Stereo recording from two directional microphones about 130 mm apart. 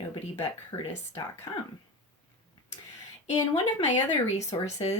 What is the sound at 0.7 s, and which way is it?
Speech, 35° left (ahead or behind).